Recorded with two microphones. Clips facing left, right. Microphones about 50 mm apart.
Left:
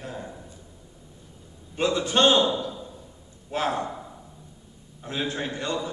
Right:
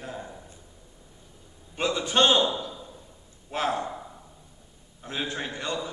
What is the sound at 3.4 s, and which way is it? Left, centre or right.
Speech, centre.